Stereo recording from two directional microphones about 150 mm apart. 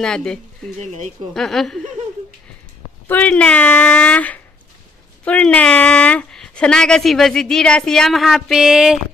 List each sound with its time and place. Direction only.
0.0 s speech: 5° left (ahead or behind)
0.7 s speech: 50° right (ahead or behind)
1.3 s speech: centre (ahead or behind)
3.1 s speech: 10° left (ahead or behind)